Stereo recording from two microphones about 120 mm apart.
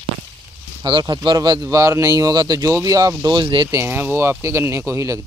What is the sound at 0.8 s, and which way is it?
Speech, 40° right (ahead or behind).